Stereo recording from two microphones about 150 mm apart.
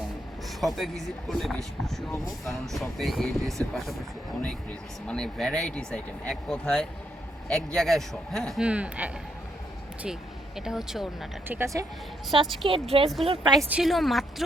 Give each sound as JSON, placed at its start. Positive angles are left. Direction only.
{"t": 0.6, "sound": "speech", "side_deg": 0}
{"t": 5.0, "sound": "speech", "side_deg": 5}
{"t": 10.6, "sound": "speech", "side_deg": -5}
{"t": 11.4, "sound": "speech", "side_deg": -15}
{"t": 12.5, "sound": "speech", "side_deg": -35}
{"t": 13.7, "sound": "speech", "side_deg": -5}